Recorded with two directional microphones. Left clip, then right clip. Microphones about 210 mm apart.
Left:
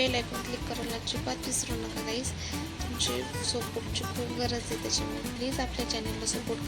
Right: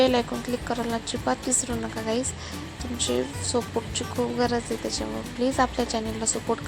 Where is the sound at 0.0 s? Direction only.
20° right (ahead or behind).